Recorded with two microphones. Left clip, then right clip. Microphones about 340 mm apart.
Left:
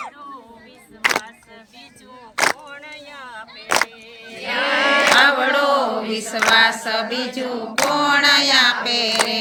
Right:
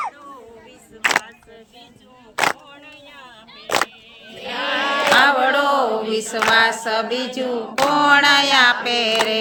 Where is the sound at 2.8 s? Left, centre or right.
Centre.